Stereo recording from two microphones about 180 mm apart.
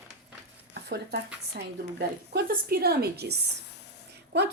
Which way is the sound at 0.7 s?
65° right (ahead or behind).